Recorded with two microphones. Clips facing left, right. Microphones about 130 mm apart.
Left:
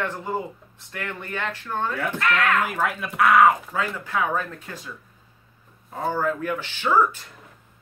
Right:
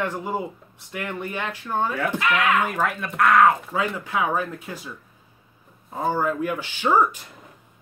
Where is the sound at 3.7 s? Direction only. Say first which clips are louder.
Right 2 dB; 15° right (ahead or behind).